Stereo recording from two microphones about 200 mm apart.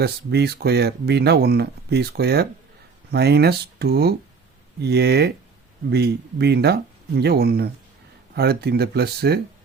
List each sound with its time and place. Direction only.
0.0 s speech: 55° right (ahead or behind)